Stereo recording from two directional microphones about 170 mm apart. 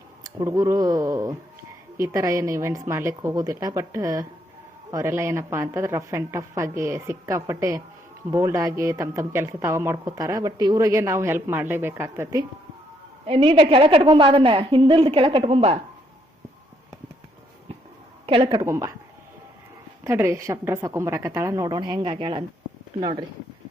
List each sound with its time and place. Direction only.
0.3 s a woman's voice: 20° right (ahead or behind)
13.2 s a woman's voice: 35° right (ahead or behind)
18.3 s a woman's voice: 30° right (ahead or behind)
18.6 s a woman's voice: 15° right (ahead or behind)
20.1 s a woman's voice: 15° right (ahead or behind)